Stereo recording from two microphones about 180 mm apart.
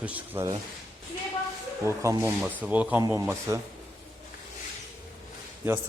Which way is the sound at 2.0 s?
15° right (ahead or behind).